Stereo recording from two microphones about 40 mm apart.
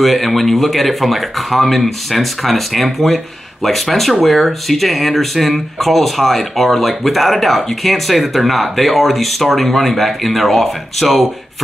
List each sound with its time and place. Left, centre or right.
0.0 s speech: centre